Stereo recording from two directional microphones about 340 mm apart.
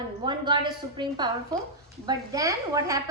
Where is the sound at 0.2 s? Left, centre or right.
Centre.